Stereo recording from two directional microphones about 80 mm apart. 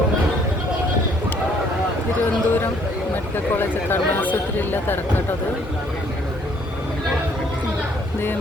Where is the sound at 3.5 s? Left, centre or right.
Left.